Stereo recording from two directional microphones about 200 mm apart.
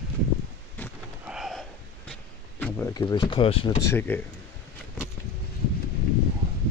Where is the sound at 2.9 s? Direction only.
20° left (ahead or behind).